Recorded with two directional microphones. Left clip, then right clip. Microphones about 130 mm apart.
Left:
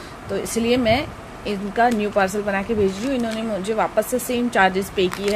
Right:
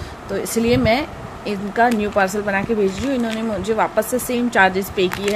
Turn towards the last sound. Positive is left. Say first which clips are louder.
# right 2 dB
turn(degrees=0)  # may be behind; listen again after turning